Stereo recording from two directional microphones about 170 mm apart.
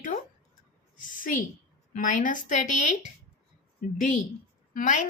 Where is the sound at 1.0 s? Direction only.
50° left (ahead or behind).